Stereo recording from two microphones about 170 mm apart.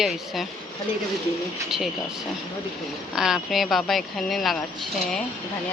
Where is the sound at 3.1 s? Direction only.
5° right (ahead or behind).